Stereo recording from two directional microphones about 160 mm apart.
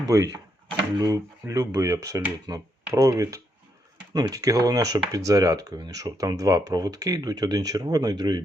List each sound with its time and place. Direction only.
0.1 s speech: 20° right (ahead or behind)